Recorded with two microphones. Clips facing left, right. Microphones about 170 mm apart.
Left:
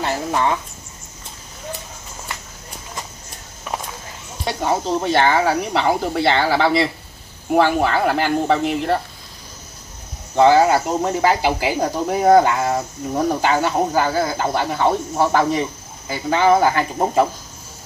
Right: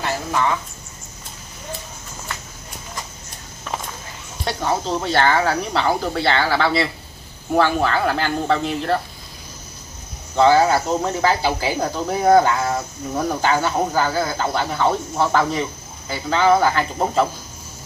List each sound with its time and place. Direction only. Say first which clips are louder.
4.5 s speech: left 2 dB; 15° left (ahead or behind)
10.3 s speech: left 2 dB; 15° left (ahead or behind)